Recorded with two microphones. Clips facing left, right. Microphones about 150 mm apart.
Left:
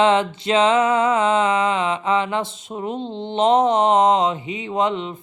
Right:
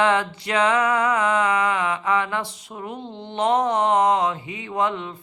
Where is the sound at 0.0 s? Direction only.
20° left (ahead or behind).